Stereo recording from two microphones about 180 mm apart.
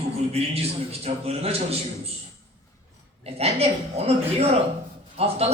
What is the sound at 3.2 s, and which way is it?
A man's voice, 35° right (ahead or behind).